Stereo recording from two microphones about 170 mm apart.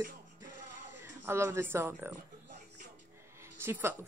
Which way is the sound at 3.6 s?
15° right (ahead or behind).